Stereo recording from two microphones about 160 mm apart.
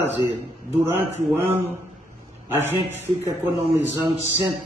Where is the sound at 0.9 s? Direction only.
15° right (ahead or behind).